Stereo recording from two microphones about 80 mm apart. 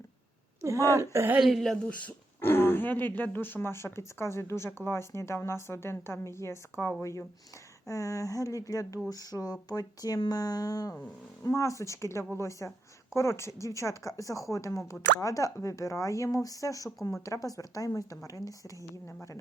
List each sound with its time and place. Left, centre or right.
0.6 s speech: right
1.4 s a woman's voice: centre
1.9 s speech: left